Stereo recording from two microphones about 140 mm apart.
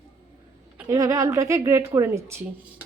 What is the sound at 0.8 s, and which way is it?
Speech, 25° right (ahead or behind).